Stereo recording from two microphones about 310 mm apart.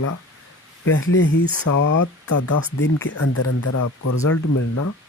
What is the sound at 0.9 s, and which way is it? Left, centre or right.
Speech, left.